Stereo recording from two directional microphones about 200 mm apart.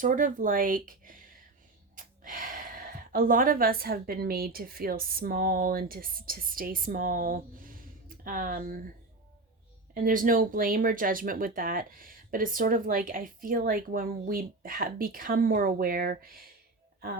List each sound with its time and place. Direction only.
0.0 s speech: 40° right (ahead or behind)
9.9 s speech: 45° right (ahead or behind)